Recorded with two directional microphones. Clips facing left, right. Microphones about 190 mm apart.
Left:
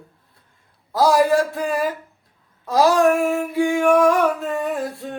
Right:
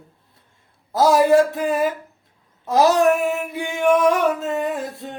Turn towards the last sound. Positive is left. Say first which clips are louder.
# left 1 dB
turn(degrees=-20)  # may be behind; listen again after turning